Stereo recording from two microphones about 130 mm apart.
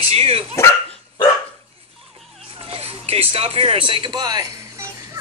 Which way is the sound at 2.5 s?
45° right (ahead or behind).